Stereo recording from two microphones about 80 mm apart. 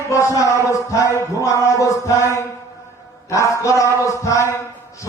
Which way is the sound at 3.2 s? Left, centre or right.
Left.